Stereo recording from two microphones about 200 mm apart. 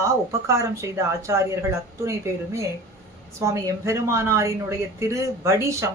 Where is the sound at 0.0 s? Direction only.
15° right (ahead or behind).